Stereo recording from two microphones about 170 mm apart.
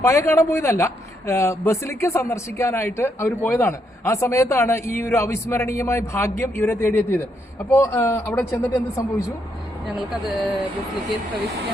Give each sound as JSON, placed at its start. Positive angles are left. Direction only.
{"t": 0.0, "sound": "speech", "side_deg": 15}